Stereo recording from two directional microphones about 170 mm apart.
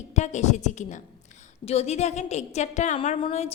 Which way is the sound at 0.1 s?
45° left (ahead or behind).